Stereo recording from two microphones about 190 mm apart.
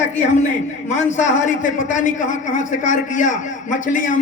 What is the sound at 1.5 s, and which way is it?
A man's voice, 40° left (ahead or behind).